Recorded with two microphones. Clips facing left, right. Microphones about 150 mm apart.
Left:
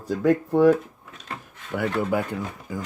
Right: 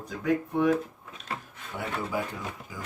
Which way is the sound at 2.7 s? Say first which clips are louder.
Left 9 dB; 55° left (ahead or behind).